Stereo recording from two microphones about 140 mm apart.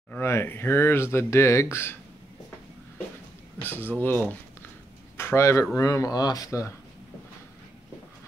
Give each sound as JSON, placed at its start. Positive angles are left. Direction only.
{"t": 0.1, "sound": "speech", "side_deg": 20}
{"t": 3.6, "sound": "speech", "side_deg": 15}